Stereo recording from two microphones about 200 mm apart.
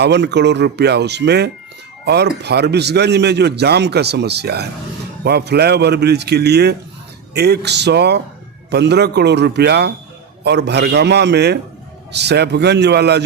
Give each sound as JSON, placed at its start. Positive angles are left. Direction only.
{"t": 0.0, "sound": "a man's voice", "side_deg": -60}